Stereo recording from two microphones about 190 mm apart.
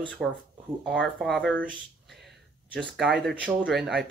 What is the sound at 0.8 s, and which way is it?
Speech, centre (ahead or behind).